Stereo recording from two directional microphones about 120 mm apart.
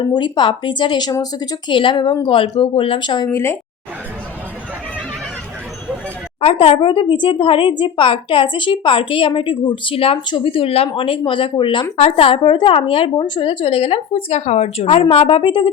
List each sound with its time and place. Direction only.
0.1 s a woman's voice: 40° left (ahead or behind)
3.3 s speech: 20° left (ahead or behind)
6.4 s a woman's voice: 50° left (ahead or behind)
11.9 s a woman's voice: 55° left (ahead or behind)
15.1 s a woman's voice: 50° left (ahead or behind)